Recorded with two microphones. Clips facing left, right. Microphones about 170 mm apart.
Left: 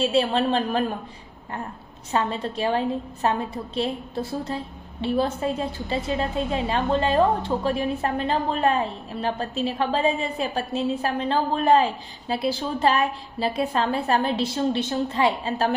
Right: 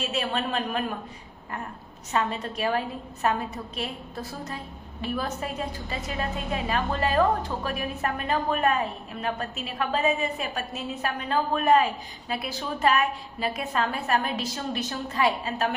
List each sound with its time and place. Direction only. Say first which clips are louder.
0.0 s a man's voice: left 8 dB; 30° left (ahead or behind)
2.1 s a woman's voice: left 3 dB; 30° left (ahead or behind)